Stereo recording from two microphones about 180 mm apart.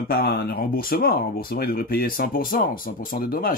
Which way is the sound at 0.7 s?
55° left (ahead or behind).